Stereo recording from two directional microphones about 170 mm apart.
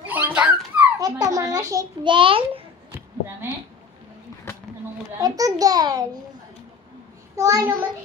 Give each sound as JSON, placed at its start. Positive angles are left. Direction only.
{"t": 0.0, "sound": "dog", "side_deg": -10}
{"t": 0.9, "sound": "a child's voice", "side_deg": -20}
{"t": 5.2, "sound": "a child's voice", "side_deg": -20}
{"t": 7.3, "sound": "a child's voice", "side_deg": -20}